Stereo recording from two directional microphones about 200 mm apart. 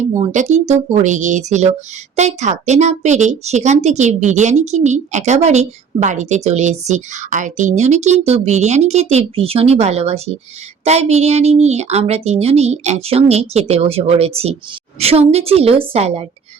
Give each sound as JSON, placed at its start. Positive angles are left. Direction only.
{"t": 0.2, "sound": "a woman's voice", "side_deg": -35}